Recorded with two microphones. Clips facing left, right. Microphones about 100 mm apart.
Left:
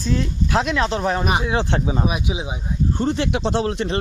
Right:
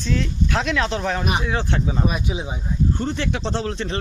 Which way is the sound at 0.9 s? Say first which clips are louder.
Left 3 dB; 35° left (ahead or behind).